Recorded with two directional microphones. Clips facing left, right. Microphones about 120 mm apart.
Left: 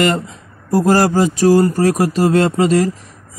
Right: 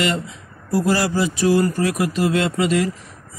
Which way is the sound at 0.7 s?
45° left (ahead or behind).